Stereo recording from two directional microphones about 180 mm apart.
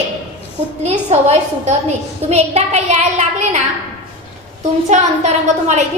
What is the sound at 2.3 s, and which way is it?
A woman's voice, 40° right (ahead or behind).